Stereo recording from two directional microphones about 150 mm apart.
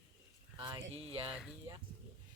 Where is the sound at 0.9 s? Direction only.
40° right (ahead or behind).